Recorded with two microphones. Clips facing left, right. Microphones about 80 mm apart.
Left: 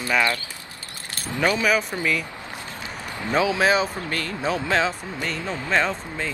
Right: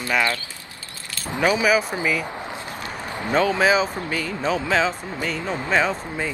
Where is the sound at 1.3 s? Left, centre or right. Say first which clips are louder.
Right 2 dB; centre.